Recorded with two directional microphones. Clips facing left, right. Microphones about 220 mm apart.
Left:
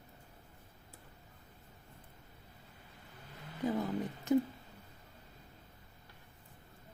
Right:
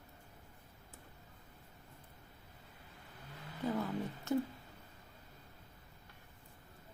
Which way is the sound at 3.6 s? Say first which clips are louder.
Left 2 dB; 15° left (ahead or behind).